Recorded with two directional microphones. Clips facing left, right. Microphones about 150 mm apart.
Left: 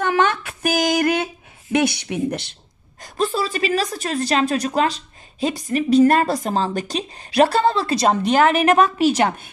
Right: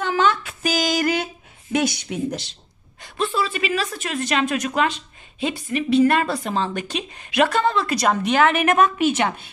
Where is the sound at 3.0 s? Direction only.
40° left (ahead or behind).